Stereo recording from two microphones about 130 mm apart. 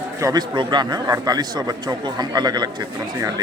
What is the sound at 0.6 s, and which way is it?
Speech, 35° right (ahead or behind).